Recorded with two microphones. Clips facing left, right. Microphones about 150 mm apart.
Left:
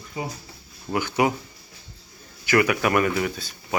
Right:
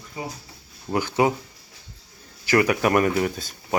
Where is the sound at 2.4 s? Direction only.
35° right (ahead or behind).